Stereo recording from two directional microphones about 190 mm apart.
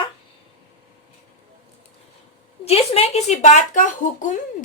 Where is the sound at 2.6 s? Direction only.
35° left (ahead or behind).